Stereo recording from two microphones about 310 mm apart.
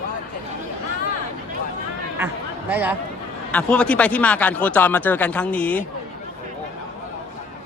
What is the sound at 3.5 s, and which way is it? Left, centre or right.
Speech, centre.